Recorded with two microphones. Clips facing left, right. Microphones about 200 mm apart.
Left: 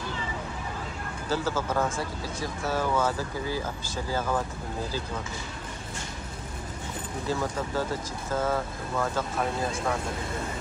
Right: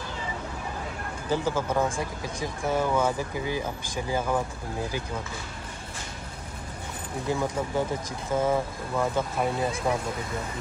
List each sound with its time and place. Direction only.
1.3 s speech: 15° right (ahead or behind)
7.2 s speech: 15° right (ahead or behind)